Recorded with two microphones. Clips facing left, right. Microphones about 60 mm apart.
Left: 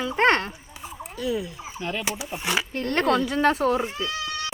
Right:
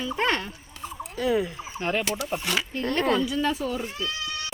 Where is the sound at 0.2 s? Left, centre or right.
Left.